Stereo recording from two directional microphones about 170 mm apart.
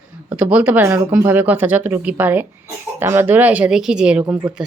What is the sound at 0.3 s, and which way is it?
Speech, 10° right (ahead or behind).